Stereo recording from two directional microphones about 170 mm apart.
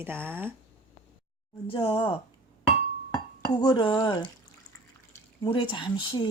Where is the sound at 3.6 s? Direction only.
25° left (ahead or behind).